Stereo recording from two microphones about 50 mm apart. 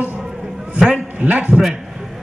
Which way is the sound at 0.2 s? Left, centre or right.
Centre.